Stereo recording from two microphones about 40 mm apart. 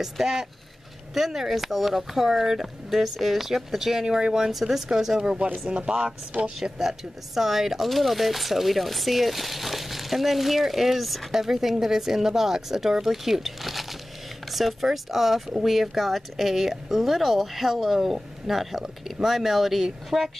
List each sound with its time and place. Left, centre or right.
0.0 s speech: centre
6.6 s speech: centre